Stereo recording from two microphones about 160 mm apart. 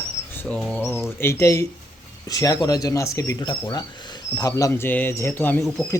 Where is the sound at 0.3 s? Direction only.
5° left (ahead or behind).